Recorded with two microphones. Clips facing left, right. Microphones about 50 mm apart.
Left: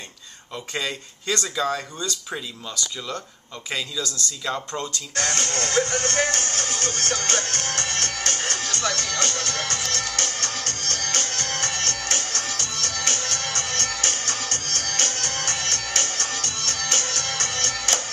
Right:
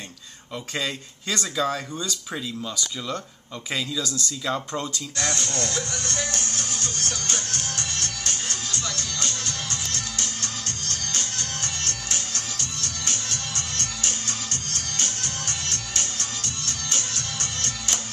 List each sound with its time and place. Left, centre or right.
0.7 s speech: centre
4.5 s speech: centre
5.1 s music: left